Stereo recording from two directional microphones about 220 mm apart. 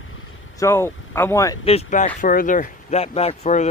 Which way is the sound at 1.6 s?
30° left (ahead or behind).